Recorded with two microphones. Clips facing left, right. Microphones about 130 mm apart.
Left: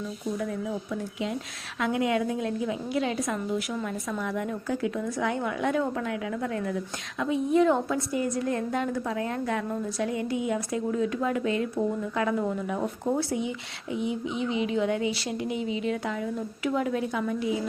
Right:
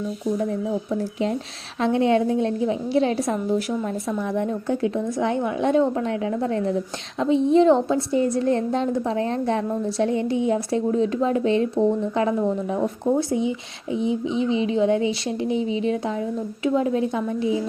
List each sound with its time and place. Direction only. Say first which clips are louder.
0.3 s a woman's voice: right 5 dB; 30° right (ahead or behind)